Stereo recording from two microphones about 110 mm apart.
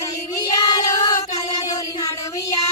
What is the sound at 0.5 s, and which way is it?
Child singing, 35° left (ahead or behind).